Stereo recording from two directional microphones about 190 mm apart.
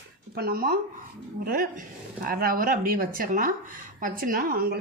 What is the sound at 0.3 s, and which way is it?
Speech, 55° right (ahead or behind).